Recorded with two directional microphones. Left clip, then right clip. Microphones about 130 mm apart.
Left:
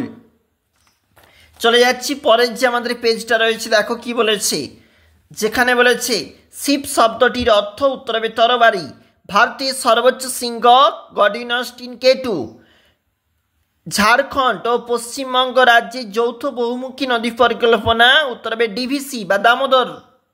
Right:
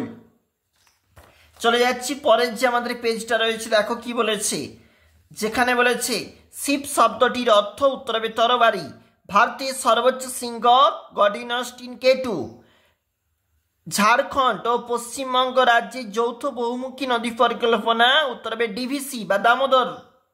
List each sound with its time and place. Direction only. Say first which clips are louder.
1.6 s a man's voice: left 6 dB; 35° left (ahead or behind)
13.8 s a woman's voice: left 4 dB; 25° left (ahead or behind)